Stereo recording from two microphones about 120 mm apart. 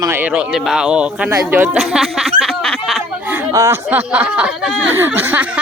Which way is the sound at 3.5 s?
25° right (ahead or behind).